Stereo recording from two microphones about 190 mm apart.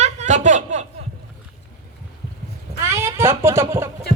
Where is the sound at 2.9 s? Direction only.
15° right (ahead or behind).